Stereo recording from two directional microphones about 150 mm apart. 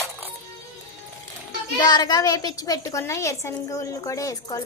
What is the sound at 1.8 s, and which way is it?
A woman's voice, 30° left (ahead or behind).